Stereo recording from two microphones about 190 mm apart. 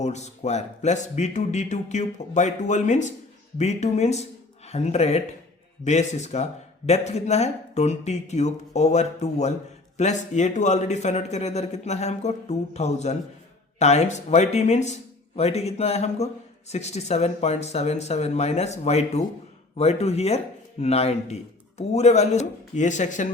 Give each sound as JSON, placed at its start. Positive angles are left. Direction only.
{"t": 0.0, "sound": "a man's voice", "side_deg": 35}